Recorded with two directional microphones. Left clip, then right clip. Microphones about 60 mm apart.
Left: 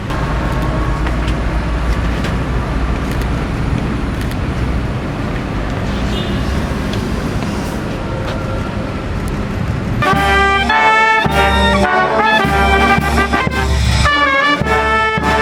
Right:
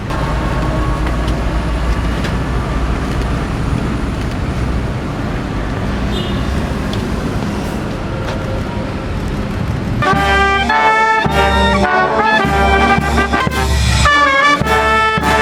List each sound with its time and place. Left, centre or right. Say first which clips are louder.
10.0 s music: even; centre
11.9 s music: even; centre
12.1 s music: even; centre
13.4 s music: right 1 dB; right